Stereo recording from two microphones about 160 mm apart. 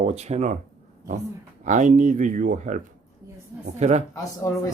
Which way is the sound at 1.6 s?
50° right (ahead or behind).